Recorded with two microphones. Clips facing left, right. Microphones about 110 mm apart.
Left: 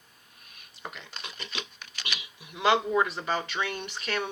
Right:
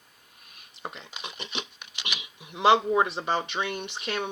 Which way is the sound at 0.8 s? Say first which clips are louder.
Right 3 dB; 25° right (ahead or behind).